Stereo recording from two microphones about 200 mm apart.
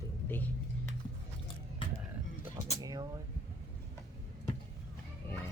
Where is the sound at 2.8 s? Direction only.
20° right (ahead or behind).